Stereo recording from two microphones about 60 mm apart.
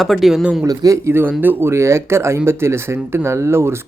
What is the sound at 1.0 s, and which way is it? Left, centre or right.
Speech, right.